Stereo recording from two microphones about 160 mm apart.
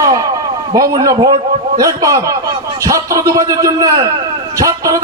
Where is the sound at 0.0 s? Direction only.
20° right (ahead or behind).